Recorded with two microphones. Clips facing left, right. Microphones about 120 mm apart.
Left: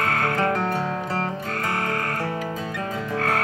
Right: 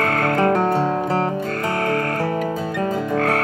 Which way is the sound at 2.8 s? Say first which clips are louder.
Right 8 dB; 40° right (ahead or behind).